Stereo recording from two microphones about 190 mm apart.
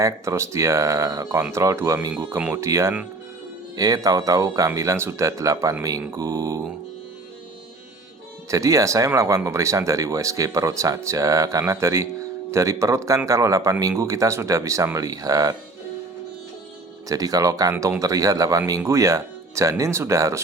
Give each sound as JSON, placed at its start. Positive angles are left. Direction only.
{"t": 0.0, "sound": "speech", "side_deg": -15}
{"t": 8.4, "sound": "speech", "side_deg": -15}
{"t": 17.1, "sound": "speech", "side_deg": -20}